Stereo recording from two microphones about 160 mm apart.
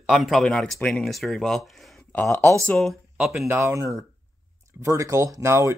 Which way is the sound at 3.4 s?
15° right (ahead or behind).